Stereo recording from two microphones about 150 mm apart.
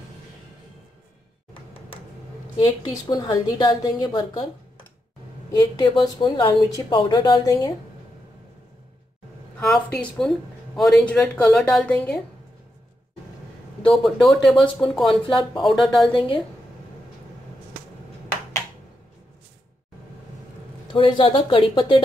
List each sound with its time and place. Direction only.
2.6 s speech: 25° left (ahead or behind)
5.5 s speech: 25° left (ahead or behind)
9.6 s speech: 5° left (ahead or behind)
13.8 s speech: centre (ahead or behind)
16.1 s speech: 35° left (ahead or behind)
20.9 s speech: 35° left (ahead or behind)